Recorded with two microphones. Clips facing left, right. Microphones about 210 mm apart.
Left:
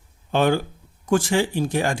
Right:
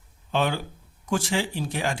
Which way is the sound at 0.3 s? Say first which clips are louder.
Left 6 dB; 50° left (ahead or behind).